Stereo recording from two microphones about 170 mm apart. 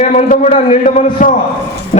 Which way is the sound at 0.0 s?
45° left (ahead or behind).